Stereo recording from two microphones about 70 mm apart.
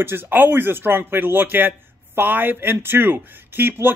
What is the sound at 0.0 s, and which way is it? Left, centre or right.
Speech, right.